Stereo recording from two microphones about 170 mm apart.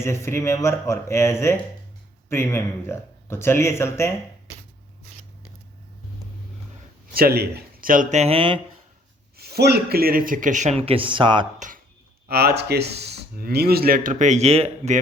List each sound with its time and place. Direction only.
0.0 s speech: 15° left (ahead or behind)
7.1 s speech: 65° right (ahead or behind); by 8.5 s 35° right (ahead or behind)
9.4 s speech: 70° right (ahead or behind); by 11.4 s 30° right (ahead or behind)
12.3 s speech: 70° right (ahead or behind); by 14.9 s 40° right (ahead or behind)